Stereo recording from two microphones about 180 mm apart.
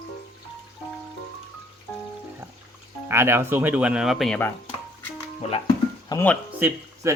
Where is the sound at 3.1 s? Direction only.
15° right (ahead or behind).